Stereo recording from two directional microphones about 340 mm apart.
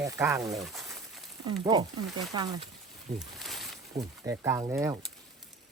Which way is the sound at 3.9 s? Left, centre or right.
Centre.